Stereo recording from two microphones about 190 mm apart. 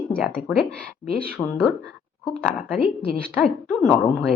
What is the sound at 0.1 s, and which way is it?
Speech, 5° left (ahead or behind).